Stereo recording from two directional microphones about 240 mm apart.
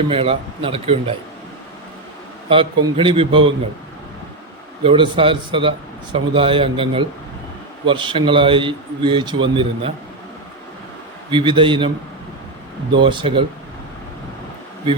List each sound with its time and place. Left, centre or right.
0.1 s speech: right
2.5 s speech: right
4.8 s speech: right
11.3 s speech: centre
12.9 s speech: centre